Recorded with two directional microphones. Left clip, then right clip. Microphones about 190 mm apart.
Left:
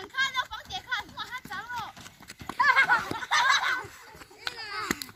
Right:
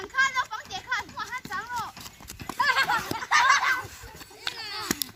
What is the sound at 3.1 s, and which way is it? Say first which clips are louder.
Snicker: right 3 dB; 15° left (ahead or behind).